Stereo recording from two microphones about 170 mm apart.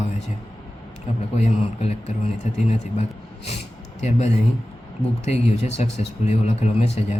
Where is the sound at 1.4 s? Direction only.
40° left (ahead or behind).